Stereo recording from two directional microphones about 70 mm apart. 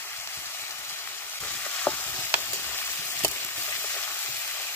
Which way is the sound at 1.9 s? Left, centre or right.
Left.